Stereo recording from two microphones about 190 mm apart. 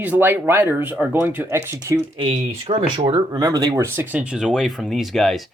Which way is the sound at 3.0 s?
20° right (ahead or behind).